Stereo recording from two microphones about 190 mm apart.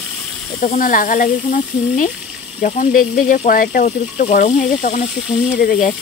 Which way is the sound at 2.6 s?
45° left (ahead or behind).